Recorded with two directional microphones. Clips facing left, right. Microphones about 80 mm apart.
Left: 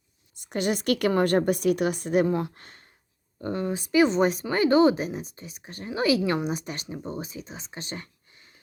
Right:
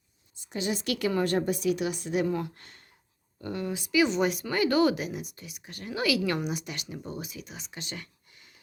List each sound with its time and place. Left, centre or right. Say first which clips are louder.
0.4 s a woman's voice: left 5 dB; left